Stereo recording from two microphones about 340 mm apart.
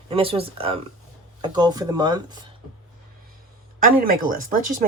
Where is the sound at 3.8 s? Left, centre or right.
Right.